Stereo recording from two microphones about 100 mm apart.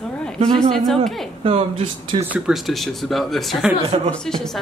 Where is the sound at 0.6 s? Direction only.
Centre (ahead or behind).